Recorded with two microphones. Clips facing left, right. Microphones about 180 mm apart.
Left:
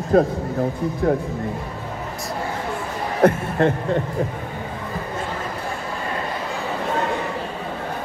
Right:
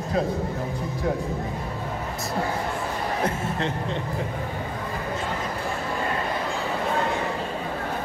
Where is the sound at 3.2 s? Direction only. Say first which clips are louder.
Left 15 dB; 50° left (ahead or behind).